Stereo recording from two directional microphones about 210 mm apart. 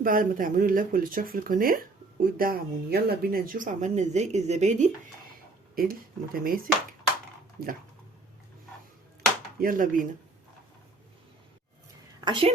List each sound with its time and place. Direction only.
0.0 s speech: 40° right (ahead or behind)
5.7 s speech: 45° right (ahead or behind)
9.6 s speech: 40° right (ahead or behind)
12.2 s speech: 25° right (ahead or behind)